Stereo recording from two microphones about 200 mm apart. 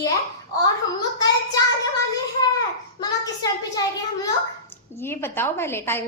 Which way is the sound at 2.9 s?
20° left (ahead or behind).